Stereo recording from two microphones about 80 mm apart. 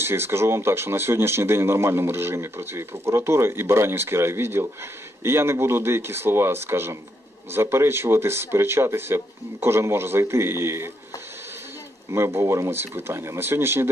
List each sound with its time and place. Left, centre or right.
0.0 s speech: right
12.1 s speech: right